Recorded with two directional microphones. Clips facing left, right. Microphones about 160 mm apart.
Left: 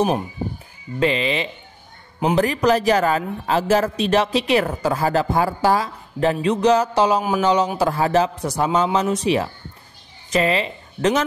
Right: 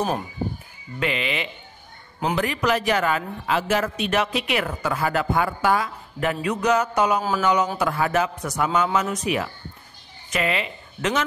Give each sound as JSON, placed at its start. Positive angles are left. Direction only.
{"t": 0.9, "sound": "a man's voice", "side_deg": 30}
{"t": 7.2, "sound": "a man's voice", "side_deg": 15}
{"t": 7.7, "sound": "a man's voice", "side_deg": 35}